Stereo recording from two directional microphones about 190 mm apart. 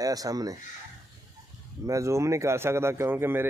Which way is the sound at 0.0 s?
20° right (ahead or behind).